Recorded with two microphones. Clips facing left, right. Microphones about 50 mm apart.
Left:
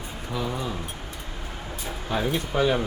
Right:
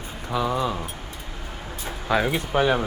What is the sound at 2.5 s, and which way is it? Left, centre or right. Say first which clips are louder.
Speech: right 2 dB; right.